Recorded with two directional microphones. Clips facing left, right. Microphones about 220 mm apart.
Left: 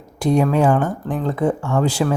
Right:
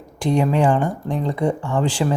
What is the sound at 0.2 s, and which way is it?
Speech, 10° left (ahead or behind).